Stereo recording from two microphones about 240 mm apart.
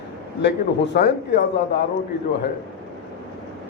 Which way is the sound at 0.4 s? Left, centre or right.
Left.